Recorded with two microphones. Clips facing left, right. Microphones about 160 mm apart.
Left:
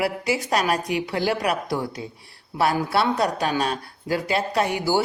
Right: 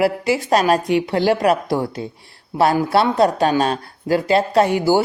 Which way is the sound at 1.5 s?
45° right (ahead or behind).